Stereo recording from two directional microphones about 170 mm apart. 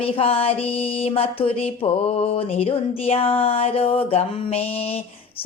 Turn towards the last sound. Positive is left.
turn(degrees=35)  # may be behind; listen again after turning